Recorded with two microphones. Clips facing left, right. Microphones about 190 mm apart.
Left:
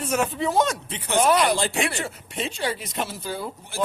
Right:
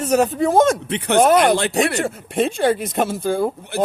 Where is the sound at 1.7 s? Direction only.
40° right (ahead or behind).